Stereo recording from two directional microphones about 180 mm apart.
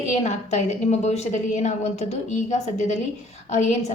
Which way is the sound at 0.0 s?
40° left (ahead or behind).